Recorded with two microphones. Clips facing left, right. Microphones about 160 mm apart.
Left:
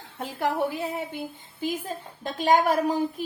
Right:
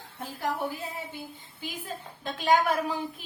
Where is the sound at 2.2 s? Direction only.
45° left (ahead or behind).